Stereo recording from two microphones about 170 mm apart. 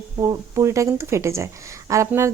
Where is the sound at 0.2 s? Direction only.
20° right (ahead or behind).